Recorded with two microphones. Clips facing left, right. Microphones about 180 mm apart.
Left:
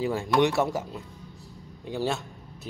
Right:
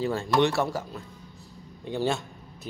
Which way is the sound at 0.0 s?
15° left (ahead or behind).